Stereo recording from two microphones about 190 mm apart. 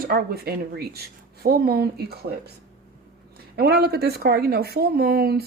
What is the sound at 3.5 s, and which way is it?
Speech, 55° right (ahead or behind).